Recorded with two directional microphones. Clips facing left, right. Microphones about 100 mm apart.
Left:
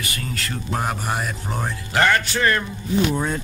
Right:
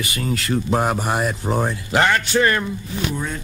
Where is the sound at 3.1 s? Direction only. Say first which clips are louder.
Left 3 dB; 35° left (ahead or behind).